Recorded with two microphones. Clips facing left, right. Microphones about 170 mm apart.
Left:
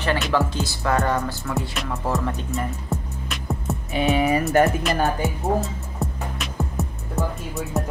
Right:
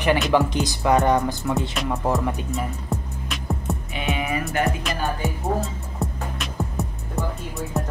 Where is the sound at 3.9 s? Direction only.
35° left (ahead or behind).